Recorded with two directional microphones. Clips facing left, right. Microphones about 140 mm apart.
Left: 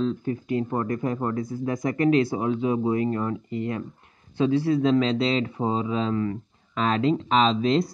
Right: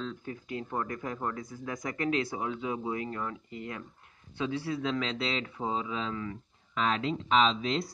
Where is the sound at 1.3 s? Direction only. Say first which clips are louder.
Left 10 dB; 35° left (ahead or behind).